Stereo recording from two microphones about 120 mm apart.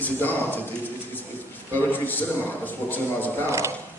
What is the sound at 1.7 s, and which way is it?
A man's voice, 15° left (ahead or behind).